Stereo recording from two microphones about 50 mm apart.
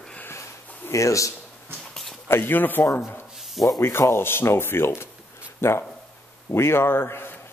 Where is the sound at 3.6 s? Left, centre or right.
Left.